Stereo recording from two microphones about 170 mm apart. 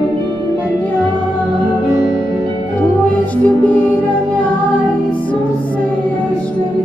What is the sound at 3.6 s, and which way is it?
Music, 10° left (ahead or behind).